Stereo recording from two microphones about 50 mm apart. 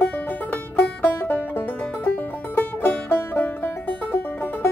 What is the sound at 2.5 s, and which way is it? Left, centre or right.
Music, left.